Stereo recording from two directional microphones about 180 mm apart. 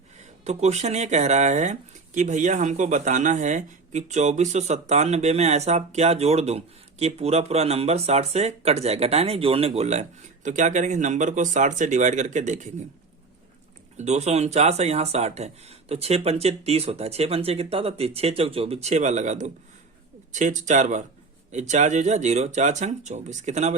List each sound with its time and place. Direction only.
0.2 s speech: 40° right (ahead or behind)
13.9 s speech: 40° right (ahead or behind)